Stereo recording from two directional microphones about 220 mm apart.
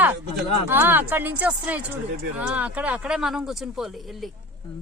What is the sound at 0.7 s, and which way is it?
A woman's voice, 10° right (ahead or behind).